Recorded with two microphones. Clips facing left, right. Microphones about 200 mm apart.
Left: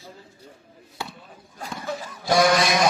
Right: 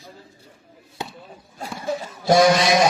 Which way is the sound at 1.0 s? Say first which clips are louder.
Right 3 dB; 20° right (ahead or behind).